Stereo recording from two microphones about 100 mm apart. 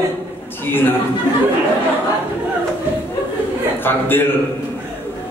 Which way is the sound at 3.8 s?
20° left (ahead or behind).